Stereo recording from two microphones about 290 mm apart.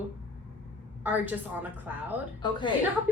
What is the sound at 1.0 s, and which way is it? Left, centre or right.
Speech, centre.